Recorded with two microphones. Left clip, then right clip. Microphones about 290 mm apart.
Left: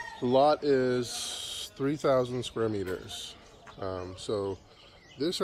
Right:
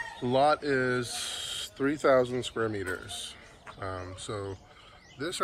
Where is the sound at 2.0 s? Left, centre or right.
Right.